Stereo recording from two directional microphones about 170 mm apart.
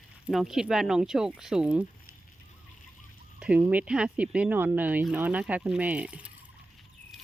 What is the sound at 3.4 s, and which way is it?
Speech, 10° right (ahead or behind).